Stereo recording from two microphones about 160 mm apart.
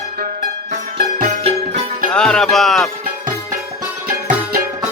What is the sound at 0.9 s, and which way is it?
Music, 60° right (ahead or behind).